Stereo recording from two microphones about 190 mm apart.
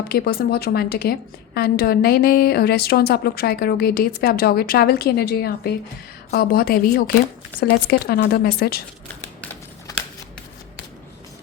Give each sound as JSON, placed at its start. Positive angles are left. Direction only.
{"t": 0.1, "sound": "a woman's voice", "side_deg": 55}